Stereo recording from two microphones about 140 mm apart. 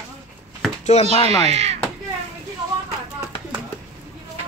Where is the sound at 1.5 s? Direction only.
50° right (ahead or behind).